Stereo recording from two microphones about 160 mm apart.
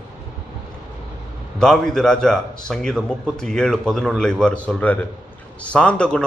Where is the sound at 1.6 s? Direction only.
5° left (ahead or behind).